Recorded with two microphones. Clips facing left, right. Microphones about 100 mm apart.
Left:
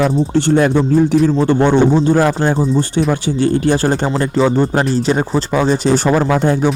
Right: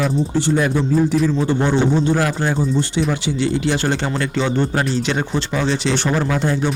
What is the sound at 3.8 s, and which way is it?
Speech, 35° left (ahead or behind).